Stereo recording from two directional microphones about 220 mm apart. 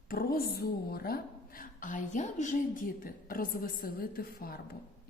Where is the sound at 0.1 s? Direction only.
40° left (ahead or behind).